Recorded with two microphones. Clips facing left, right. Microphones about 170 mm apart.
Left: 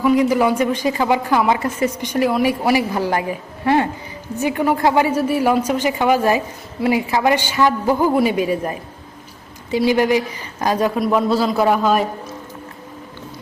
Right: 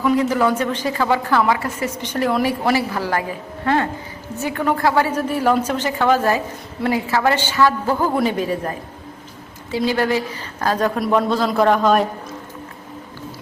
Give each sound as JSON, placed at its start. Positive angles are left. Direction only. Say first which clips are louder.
{"t": 0.0, "sound": "a woman's voice", "louder": "left 2 dB", "side_deg": 15}
{"t": 9.7, "sound": "a woman's voice", "louder": "left 3 dB", "side_deg": 15}